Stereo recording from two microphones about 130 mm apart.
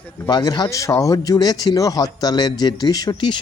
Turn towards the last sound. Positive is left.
turn(degrees=30)  # may be behind; listen again after turning